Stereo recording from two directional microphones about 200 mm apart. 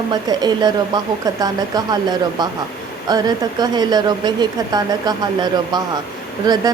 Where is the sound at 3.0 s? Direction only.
20° right (ahead or behind).